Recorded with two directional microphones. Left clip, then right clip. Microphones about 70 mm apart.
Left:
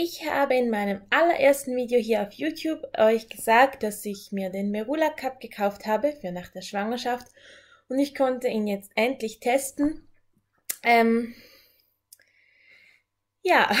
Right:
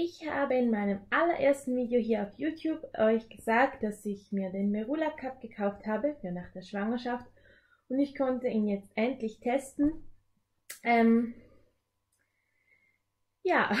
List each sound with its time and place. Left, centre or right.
0.0 s a woman's voice: left
10.8 s a woman's voice: left
13.4 s speech: left